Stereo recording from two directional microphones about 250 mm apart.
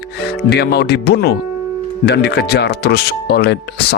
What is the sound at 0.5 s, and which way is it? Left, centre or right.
Speech, left.